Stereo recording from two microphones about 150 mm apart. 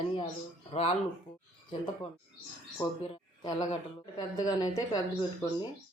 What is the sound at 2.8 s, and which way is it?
Speech, 30° left (ahead or behind).